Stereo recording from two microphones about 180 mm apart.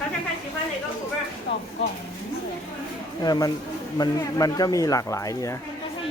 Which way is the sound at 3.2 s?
20° left (ahead or behind).